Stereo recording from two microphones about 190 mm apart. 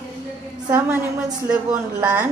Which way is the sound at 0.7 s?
10° right (ahead or behind).